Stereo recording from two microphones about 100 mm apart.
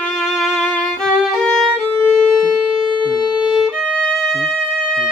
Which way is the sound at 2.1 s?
Centre (ahead or behind).